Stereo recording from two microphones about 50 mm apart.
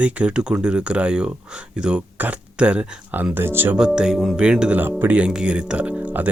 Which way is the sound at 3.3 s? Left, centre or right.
Right.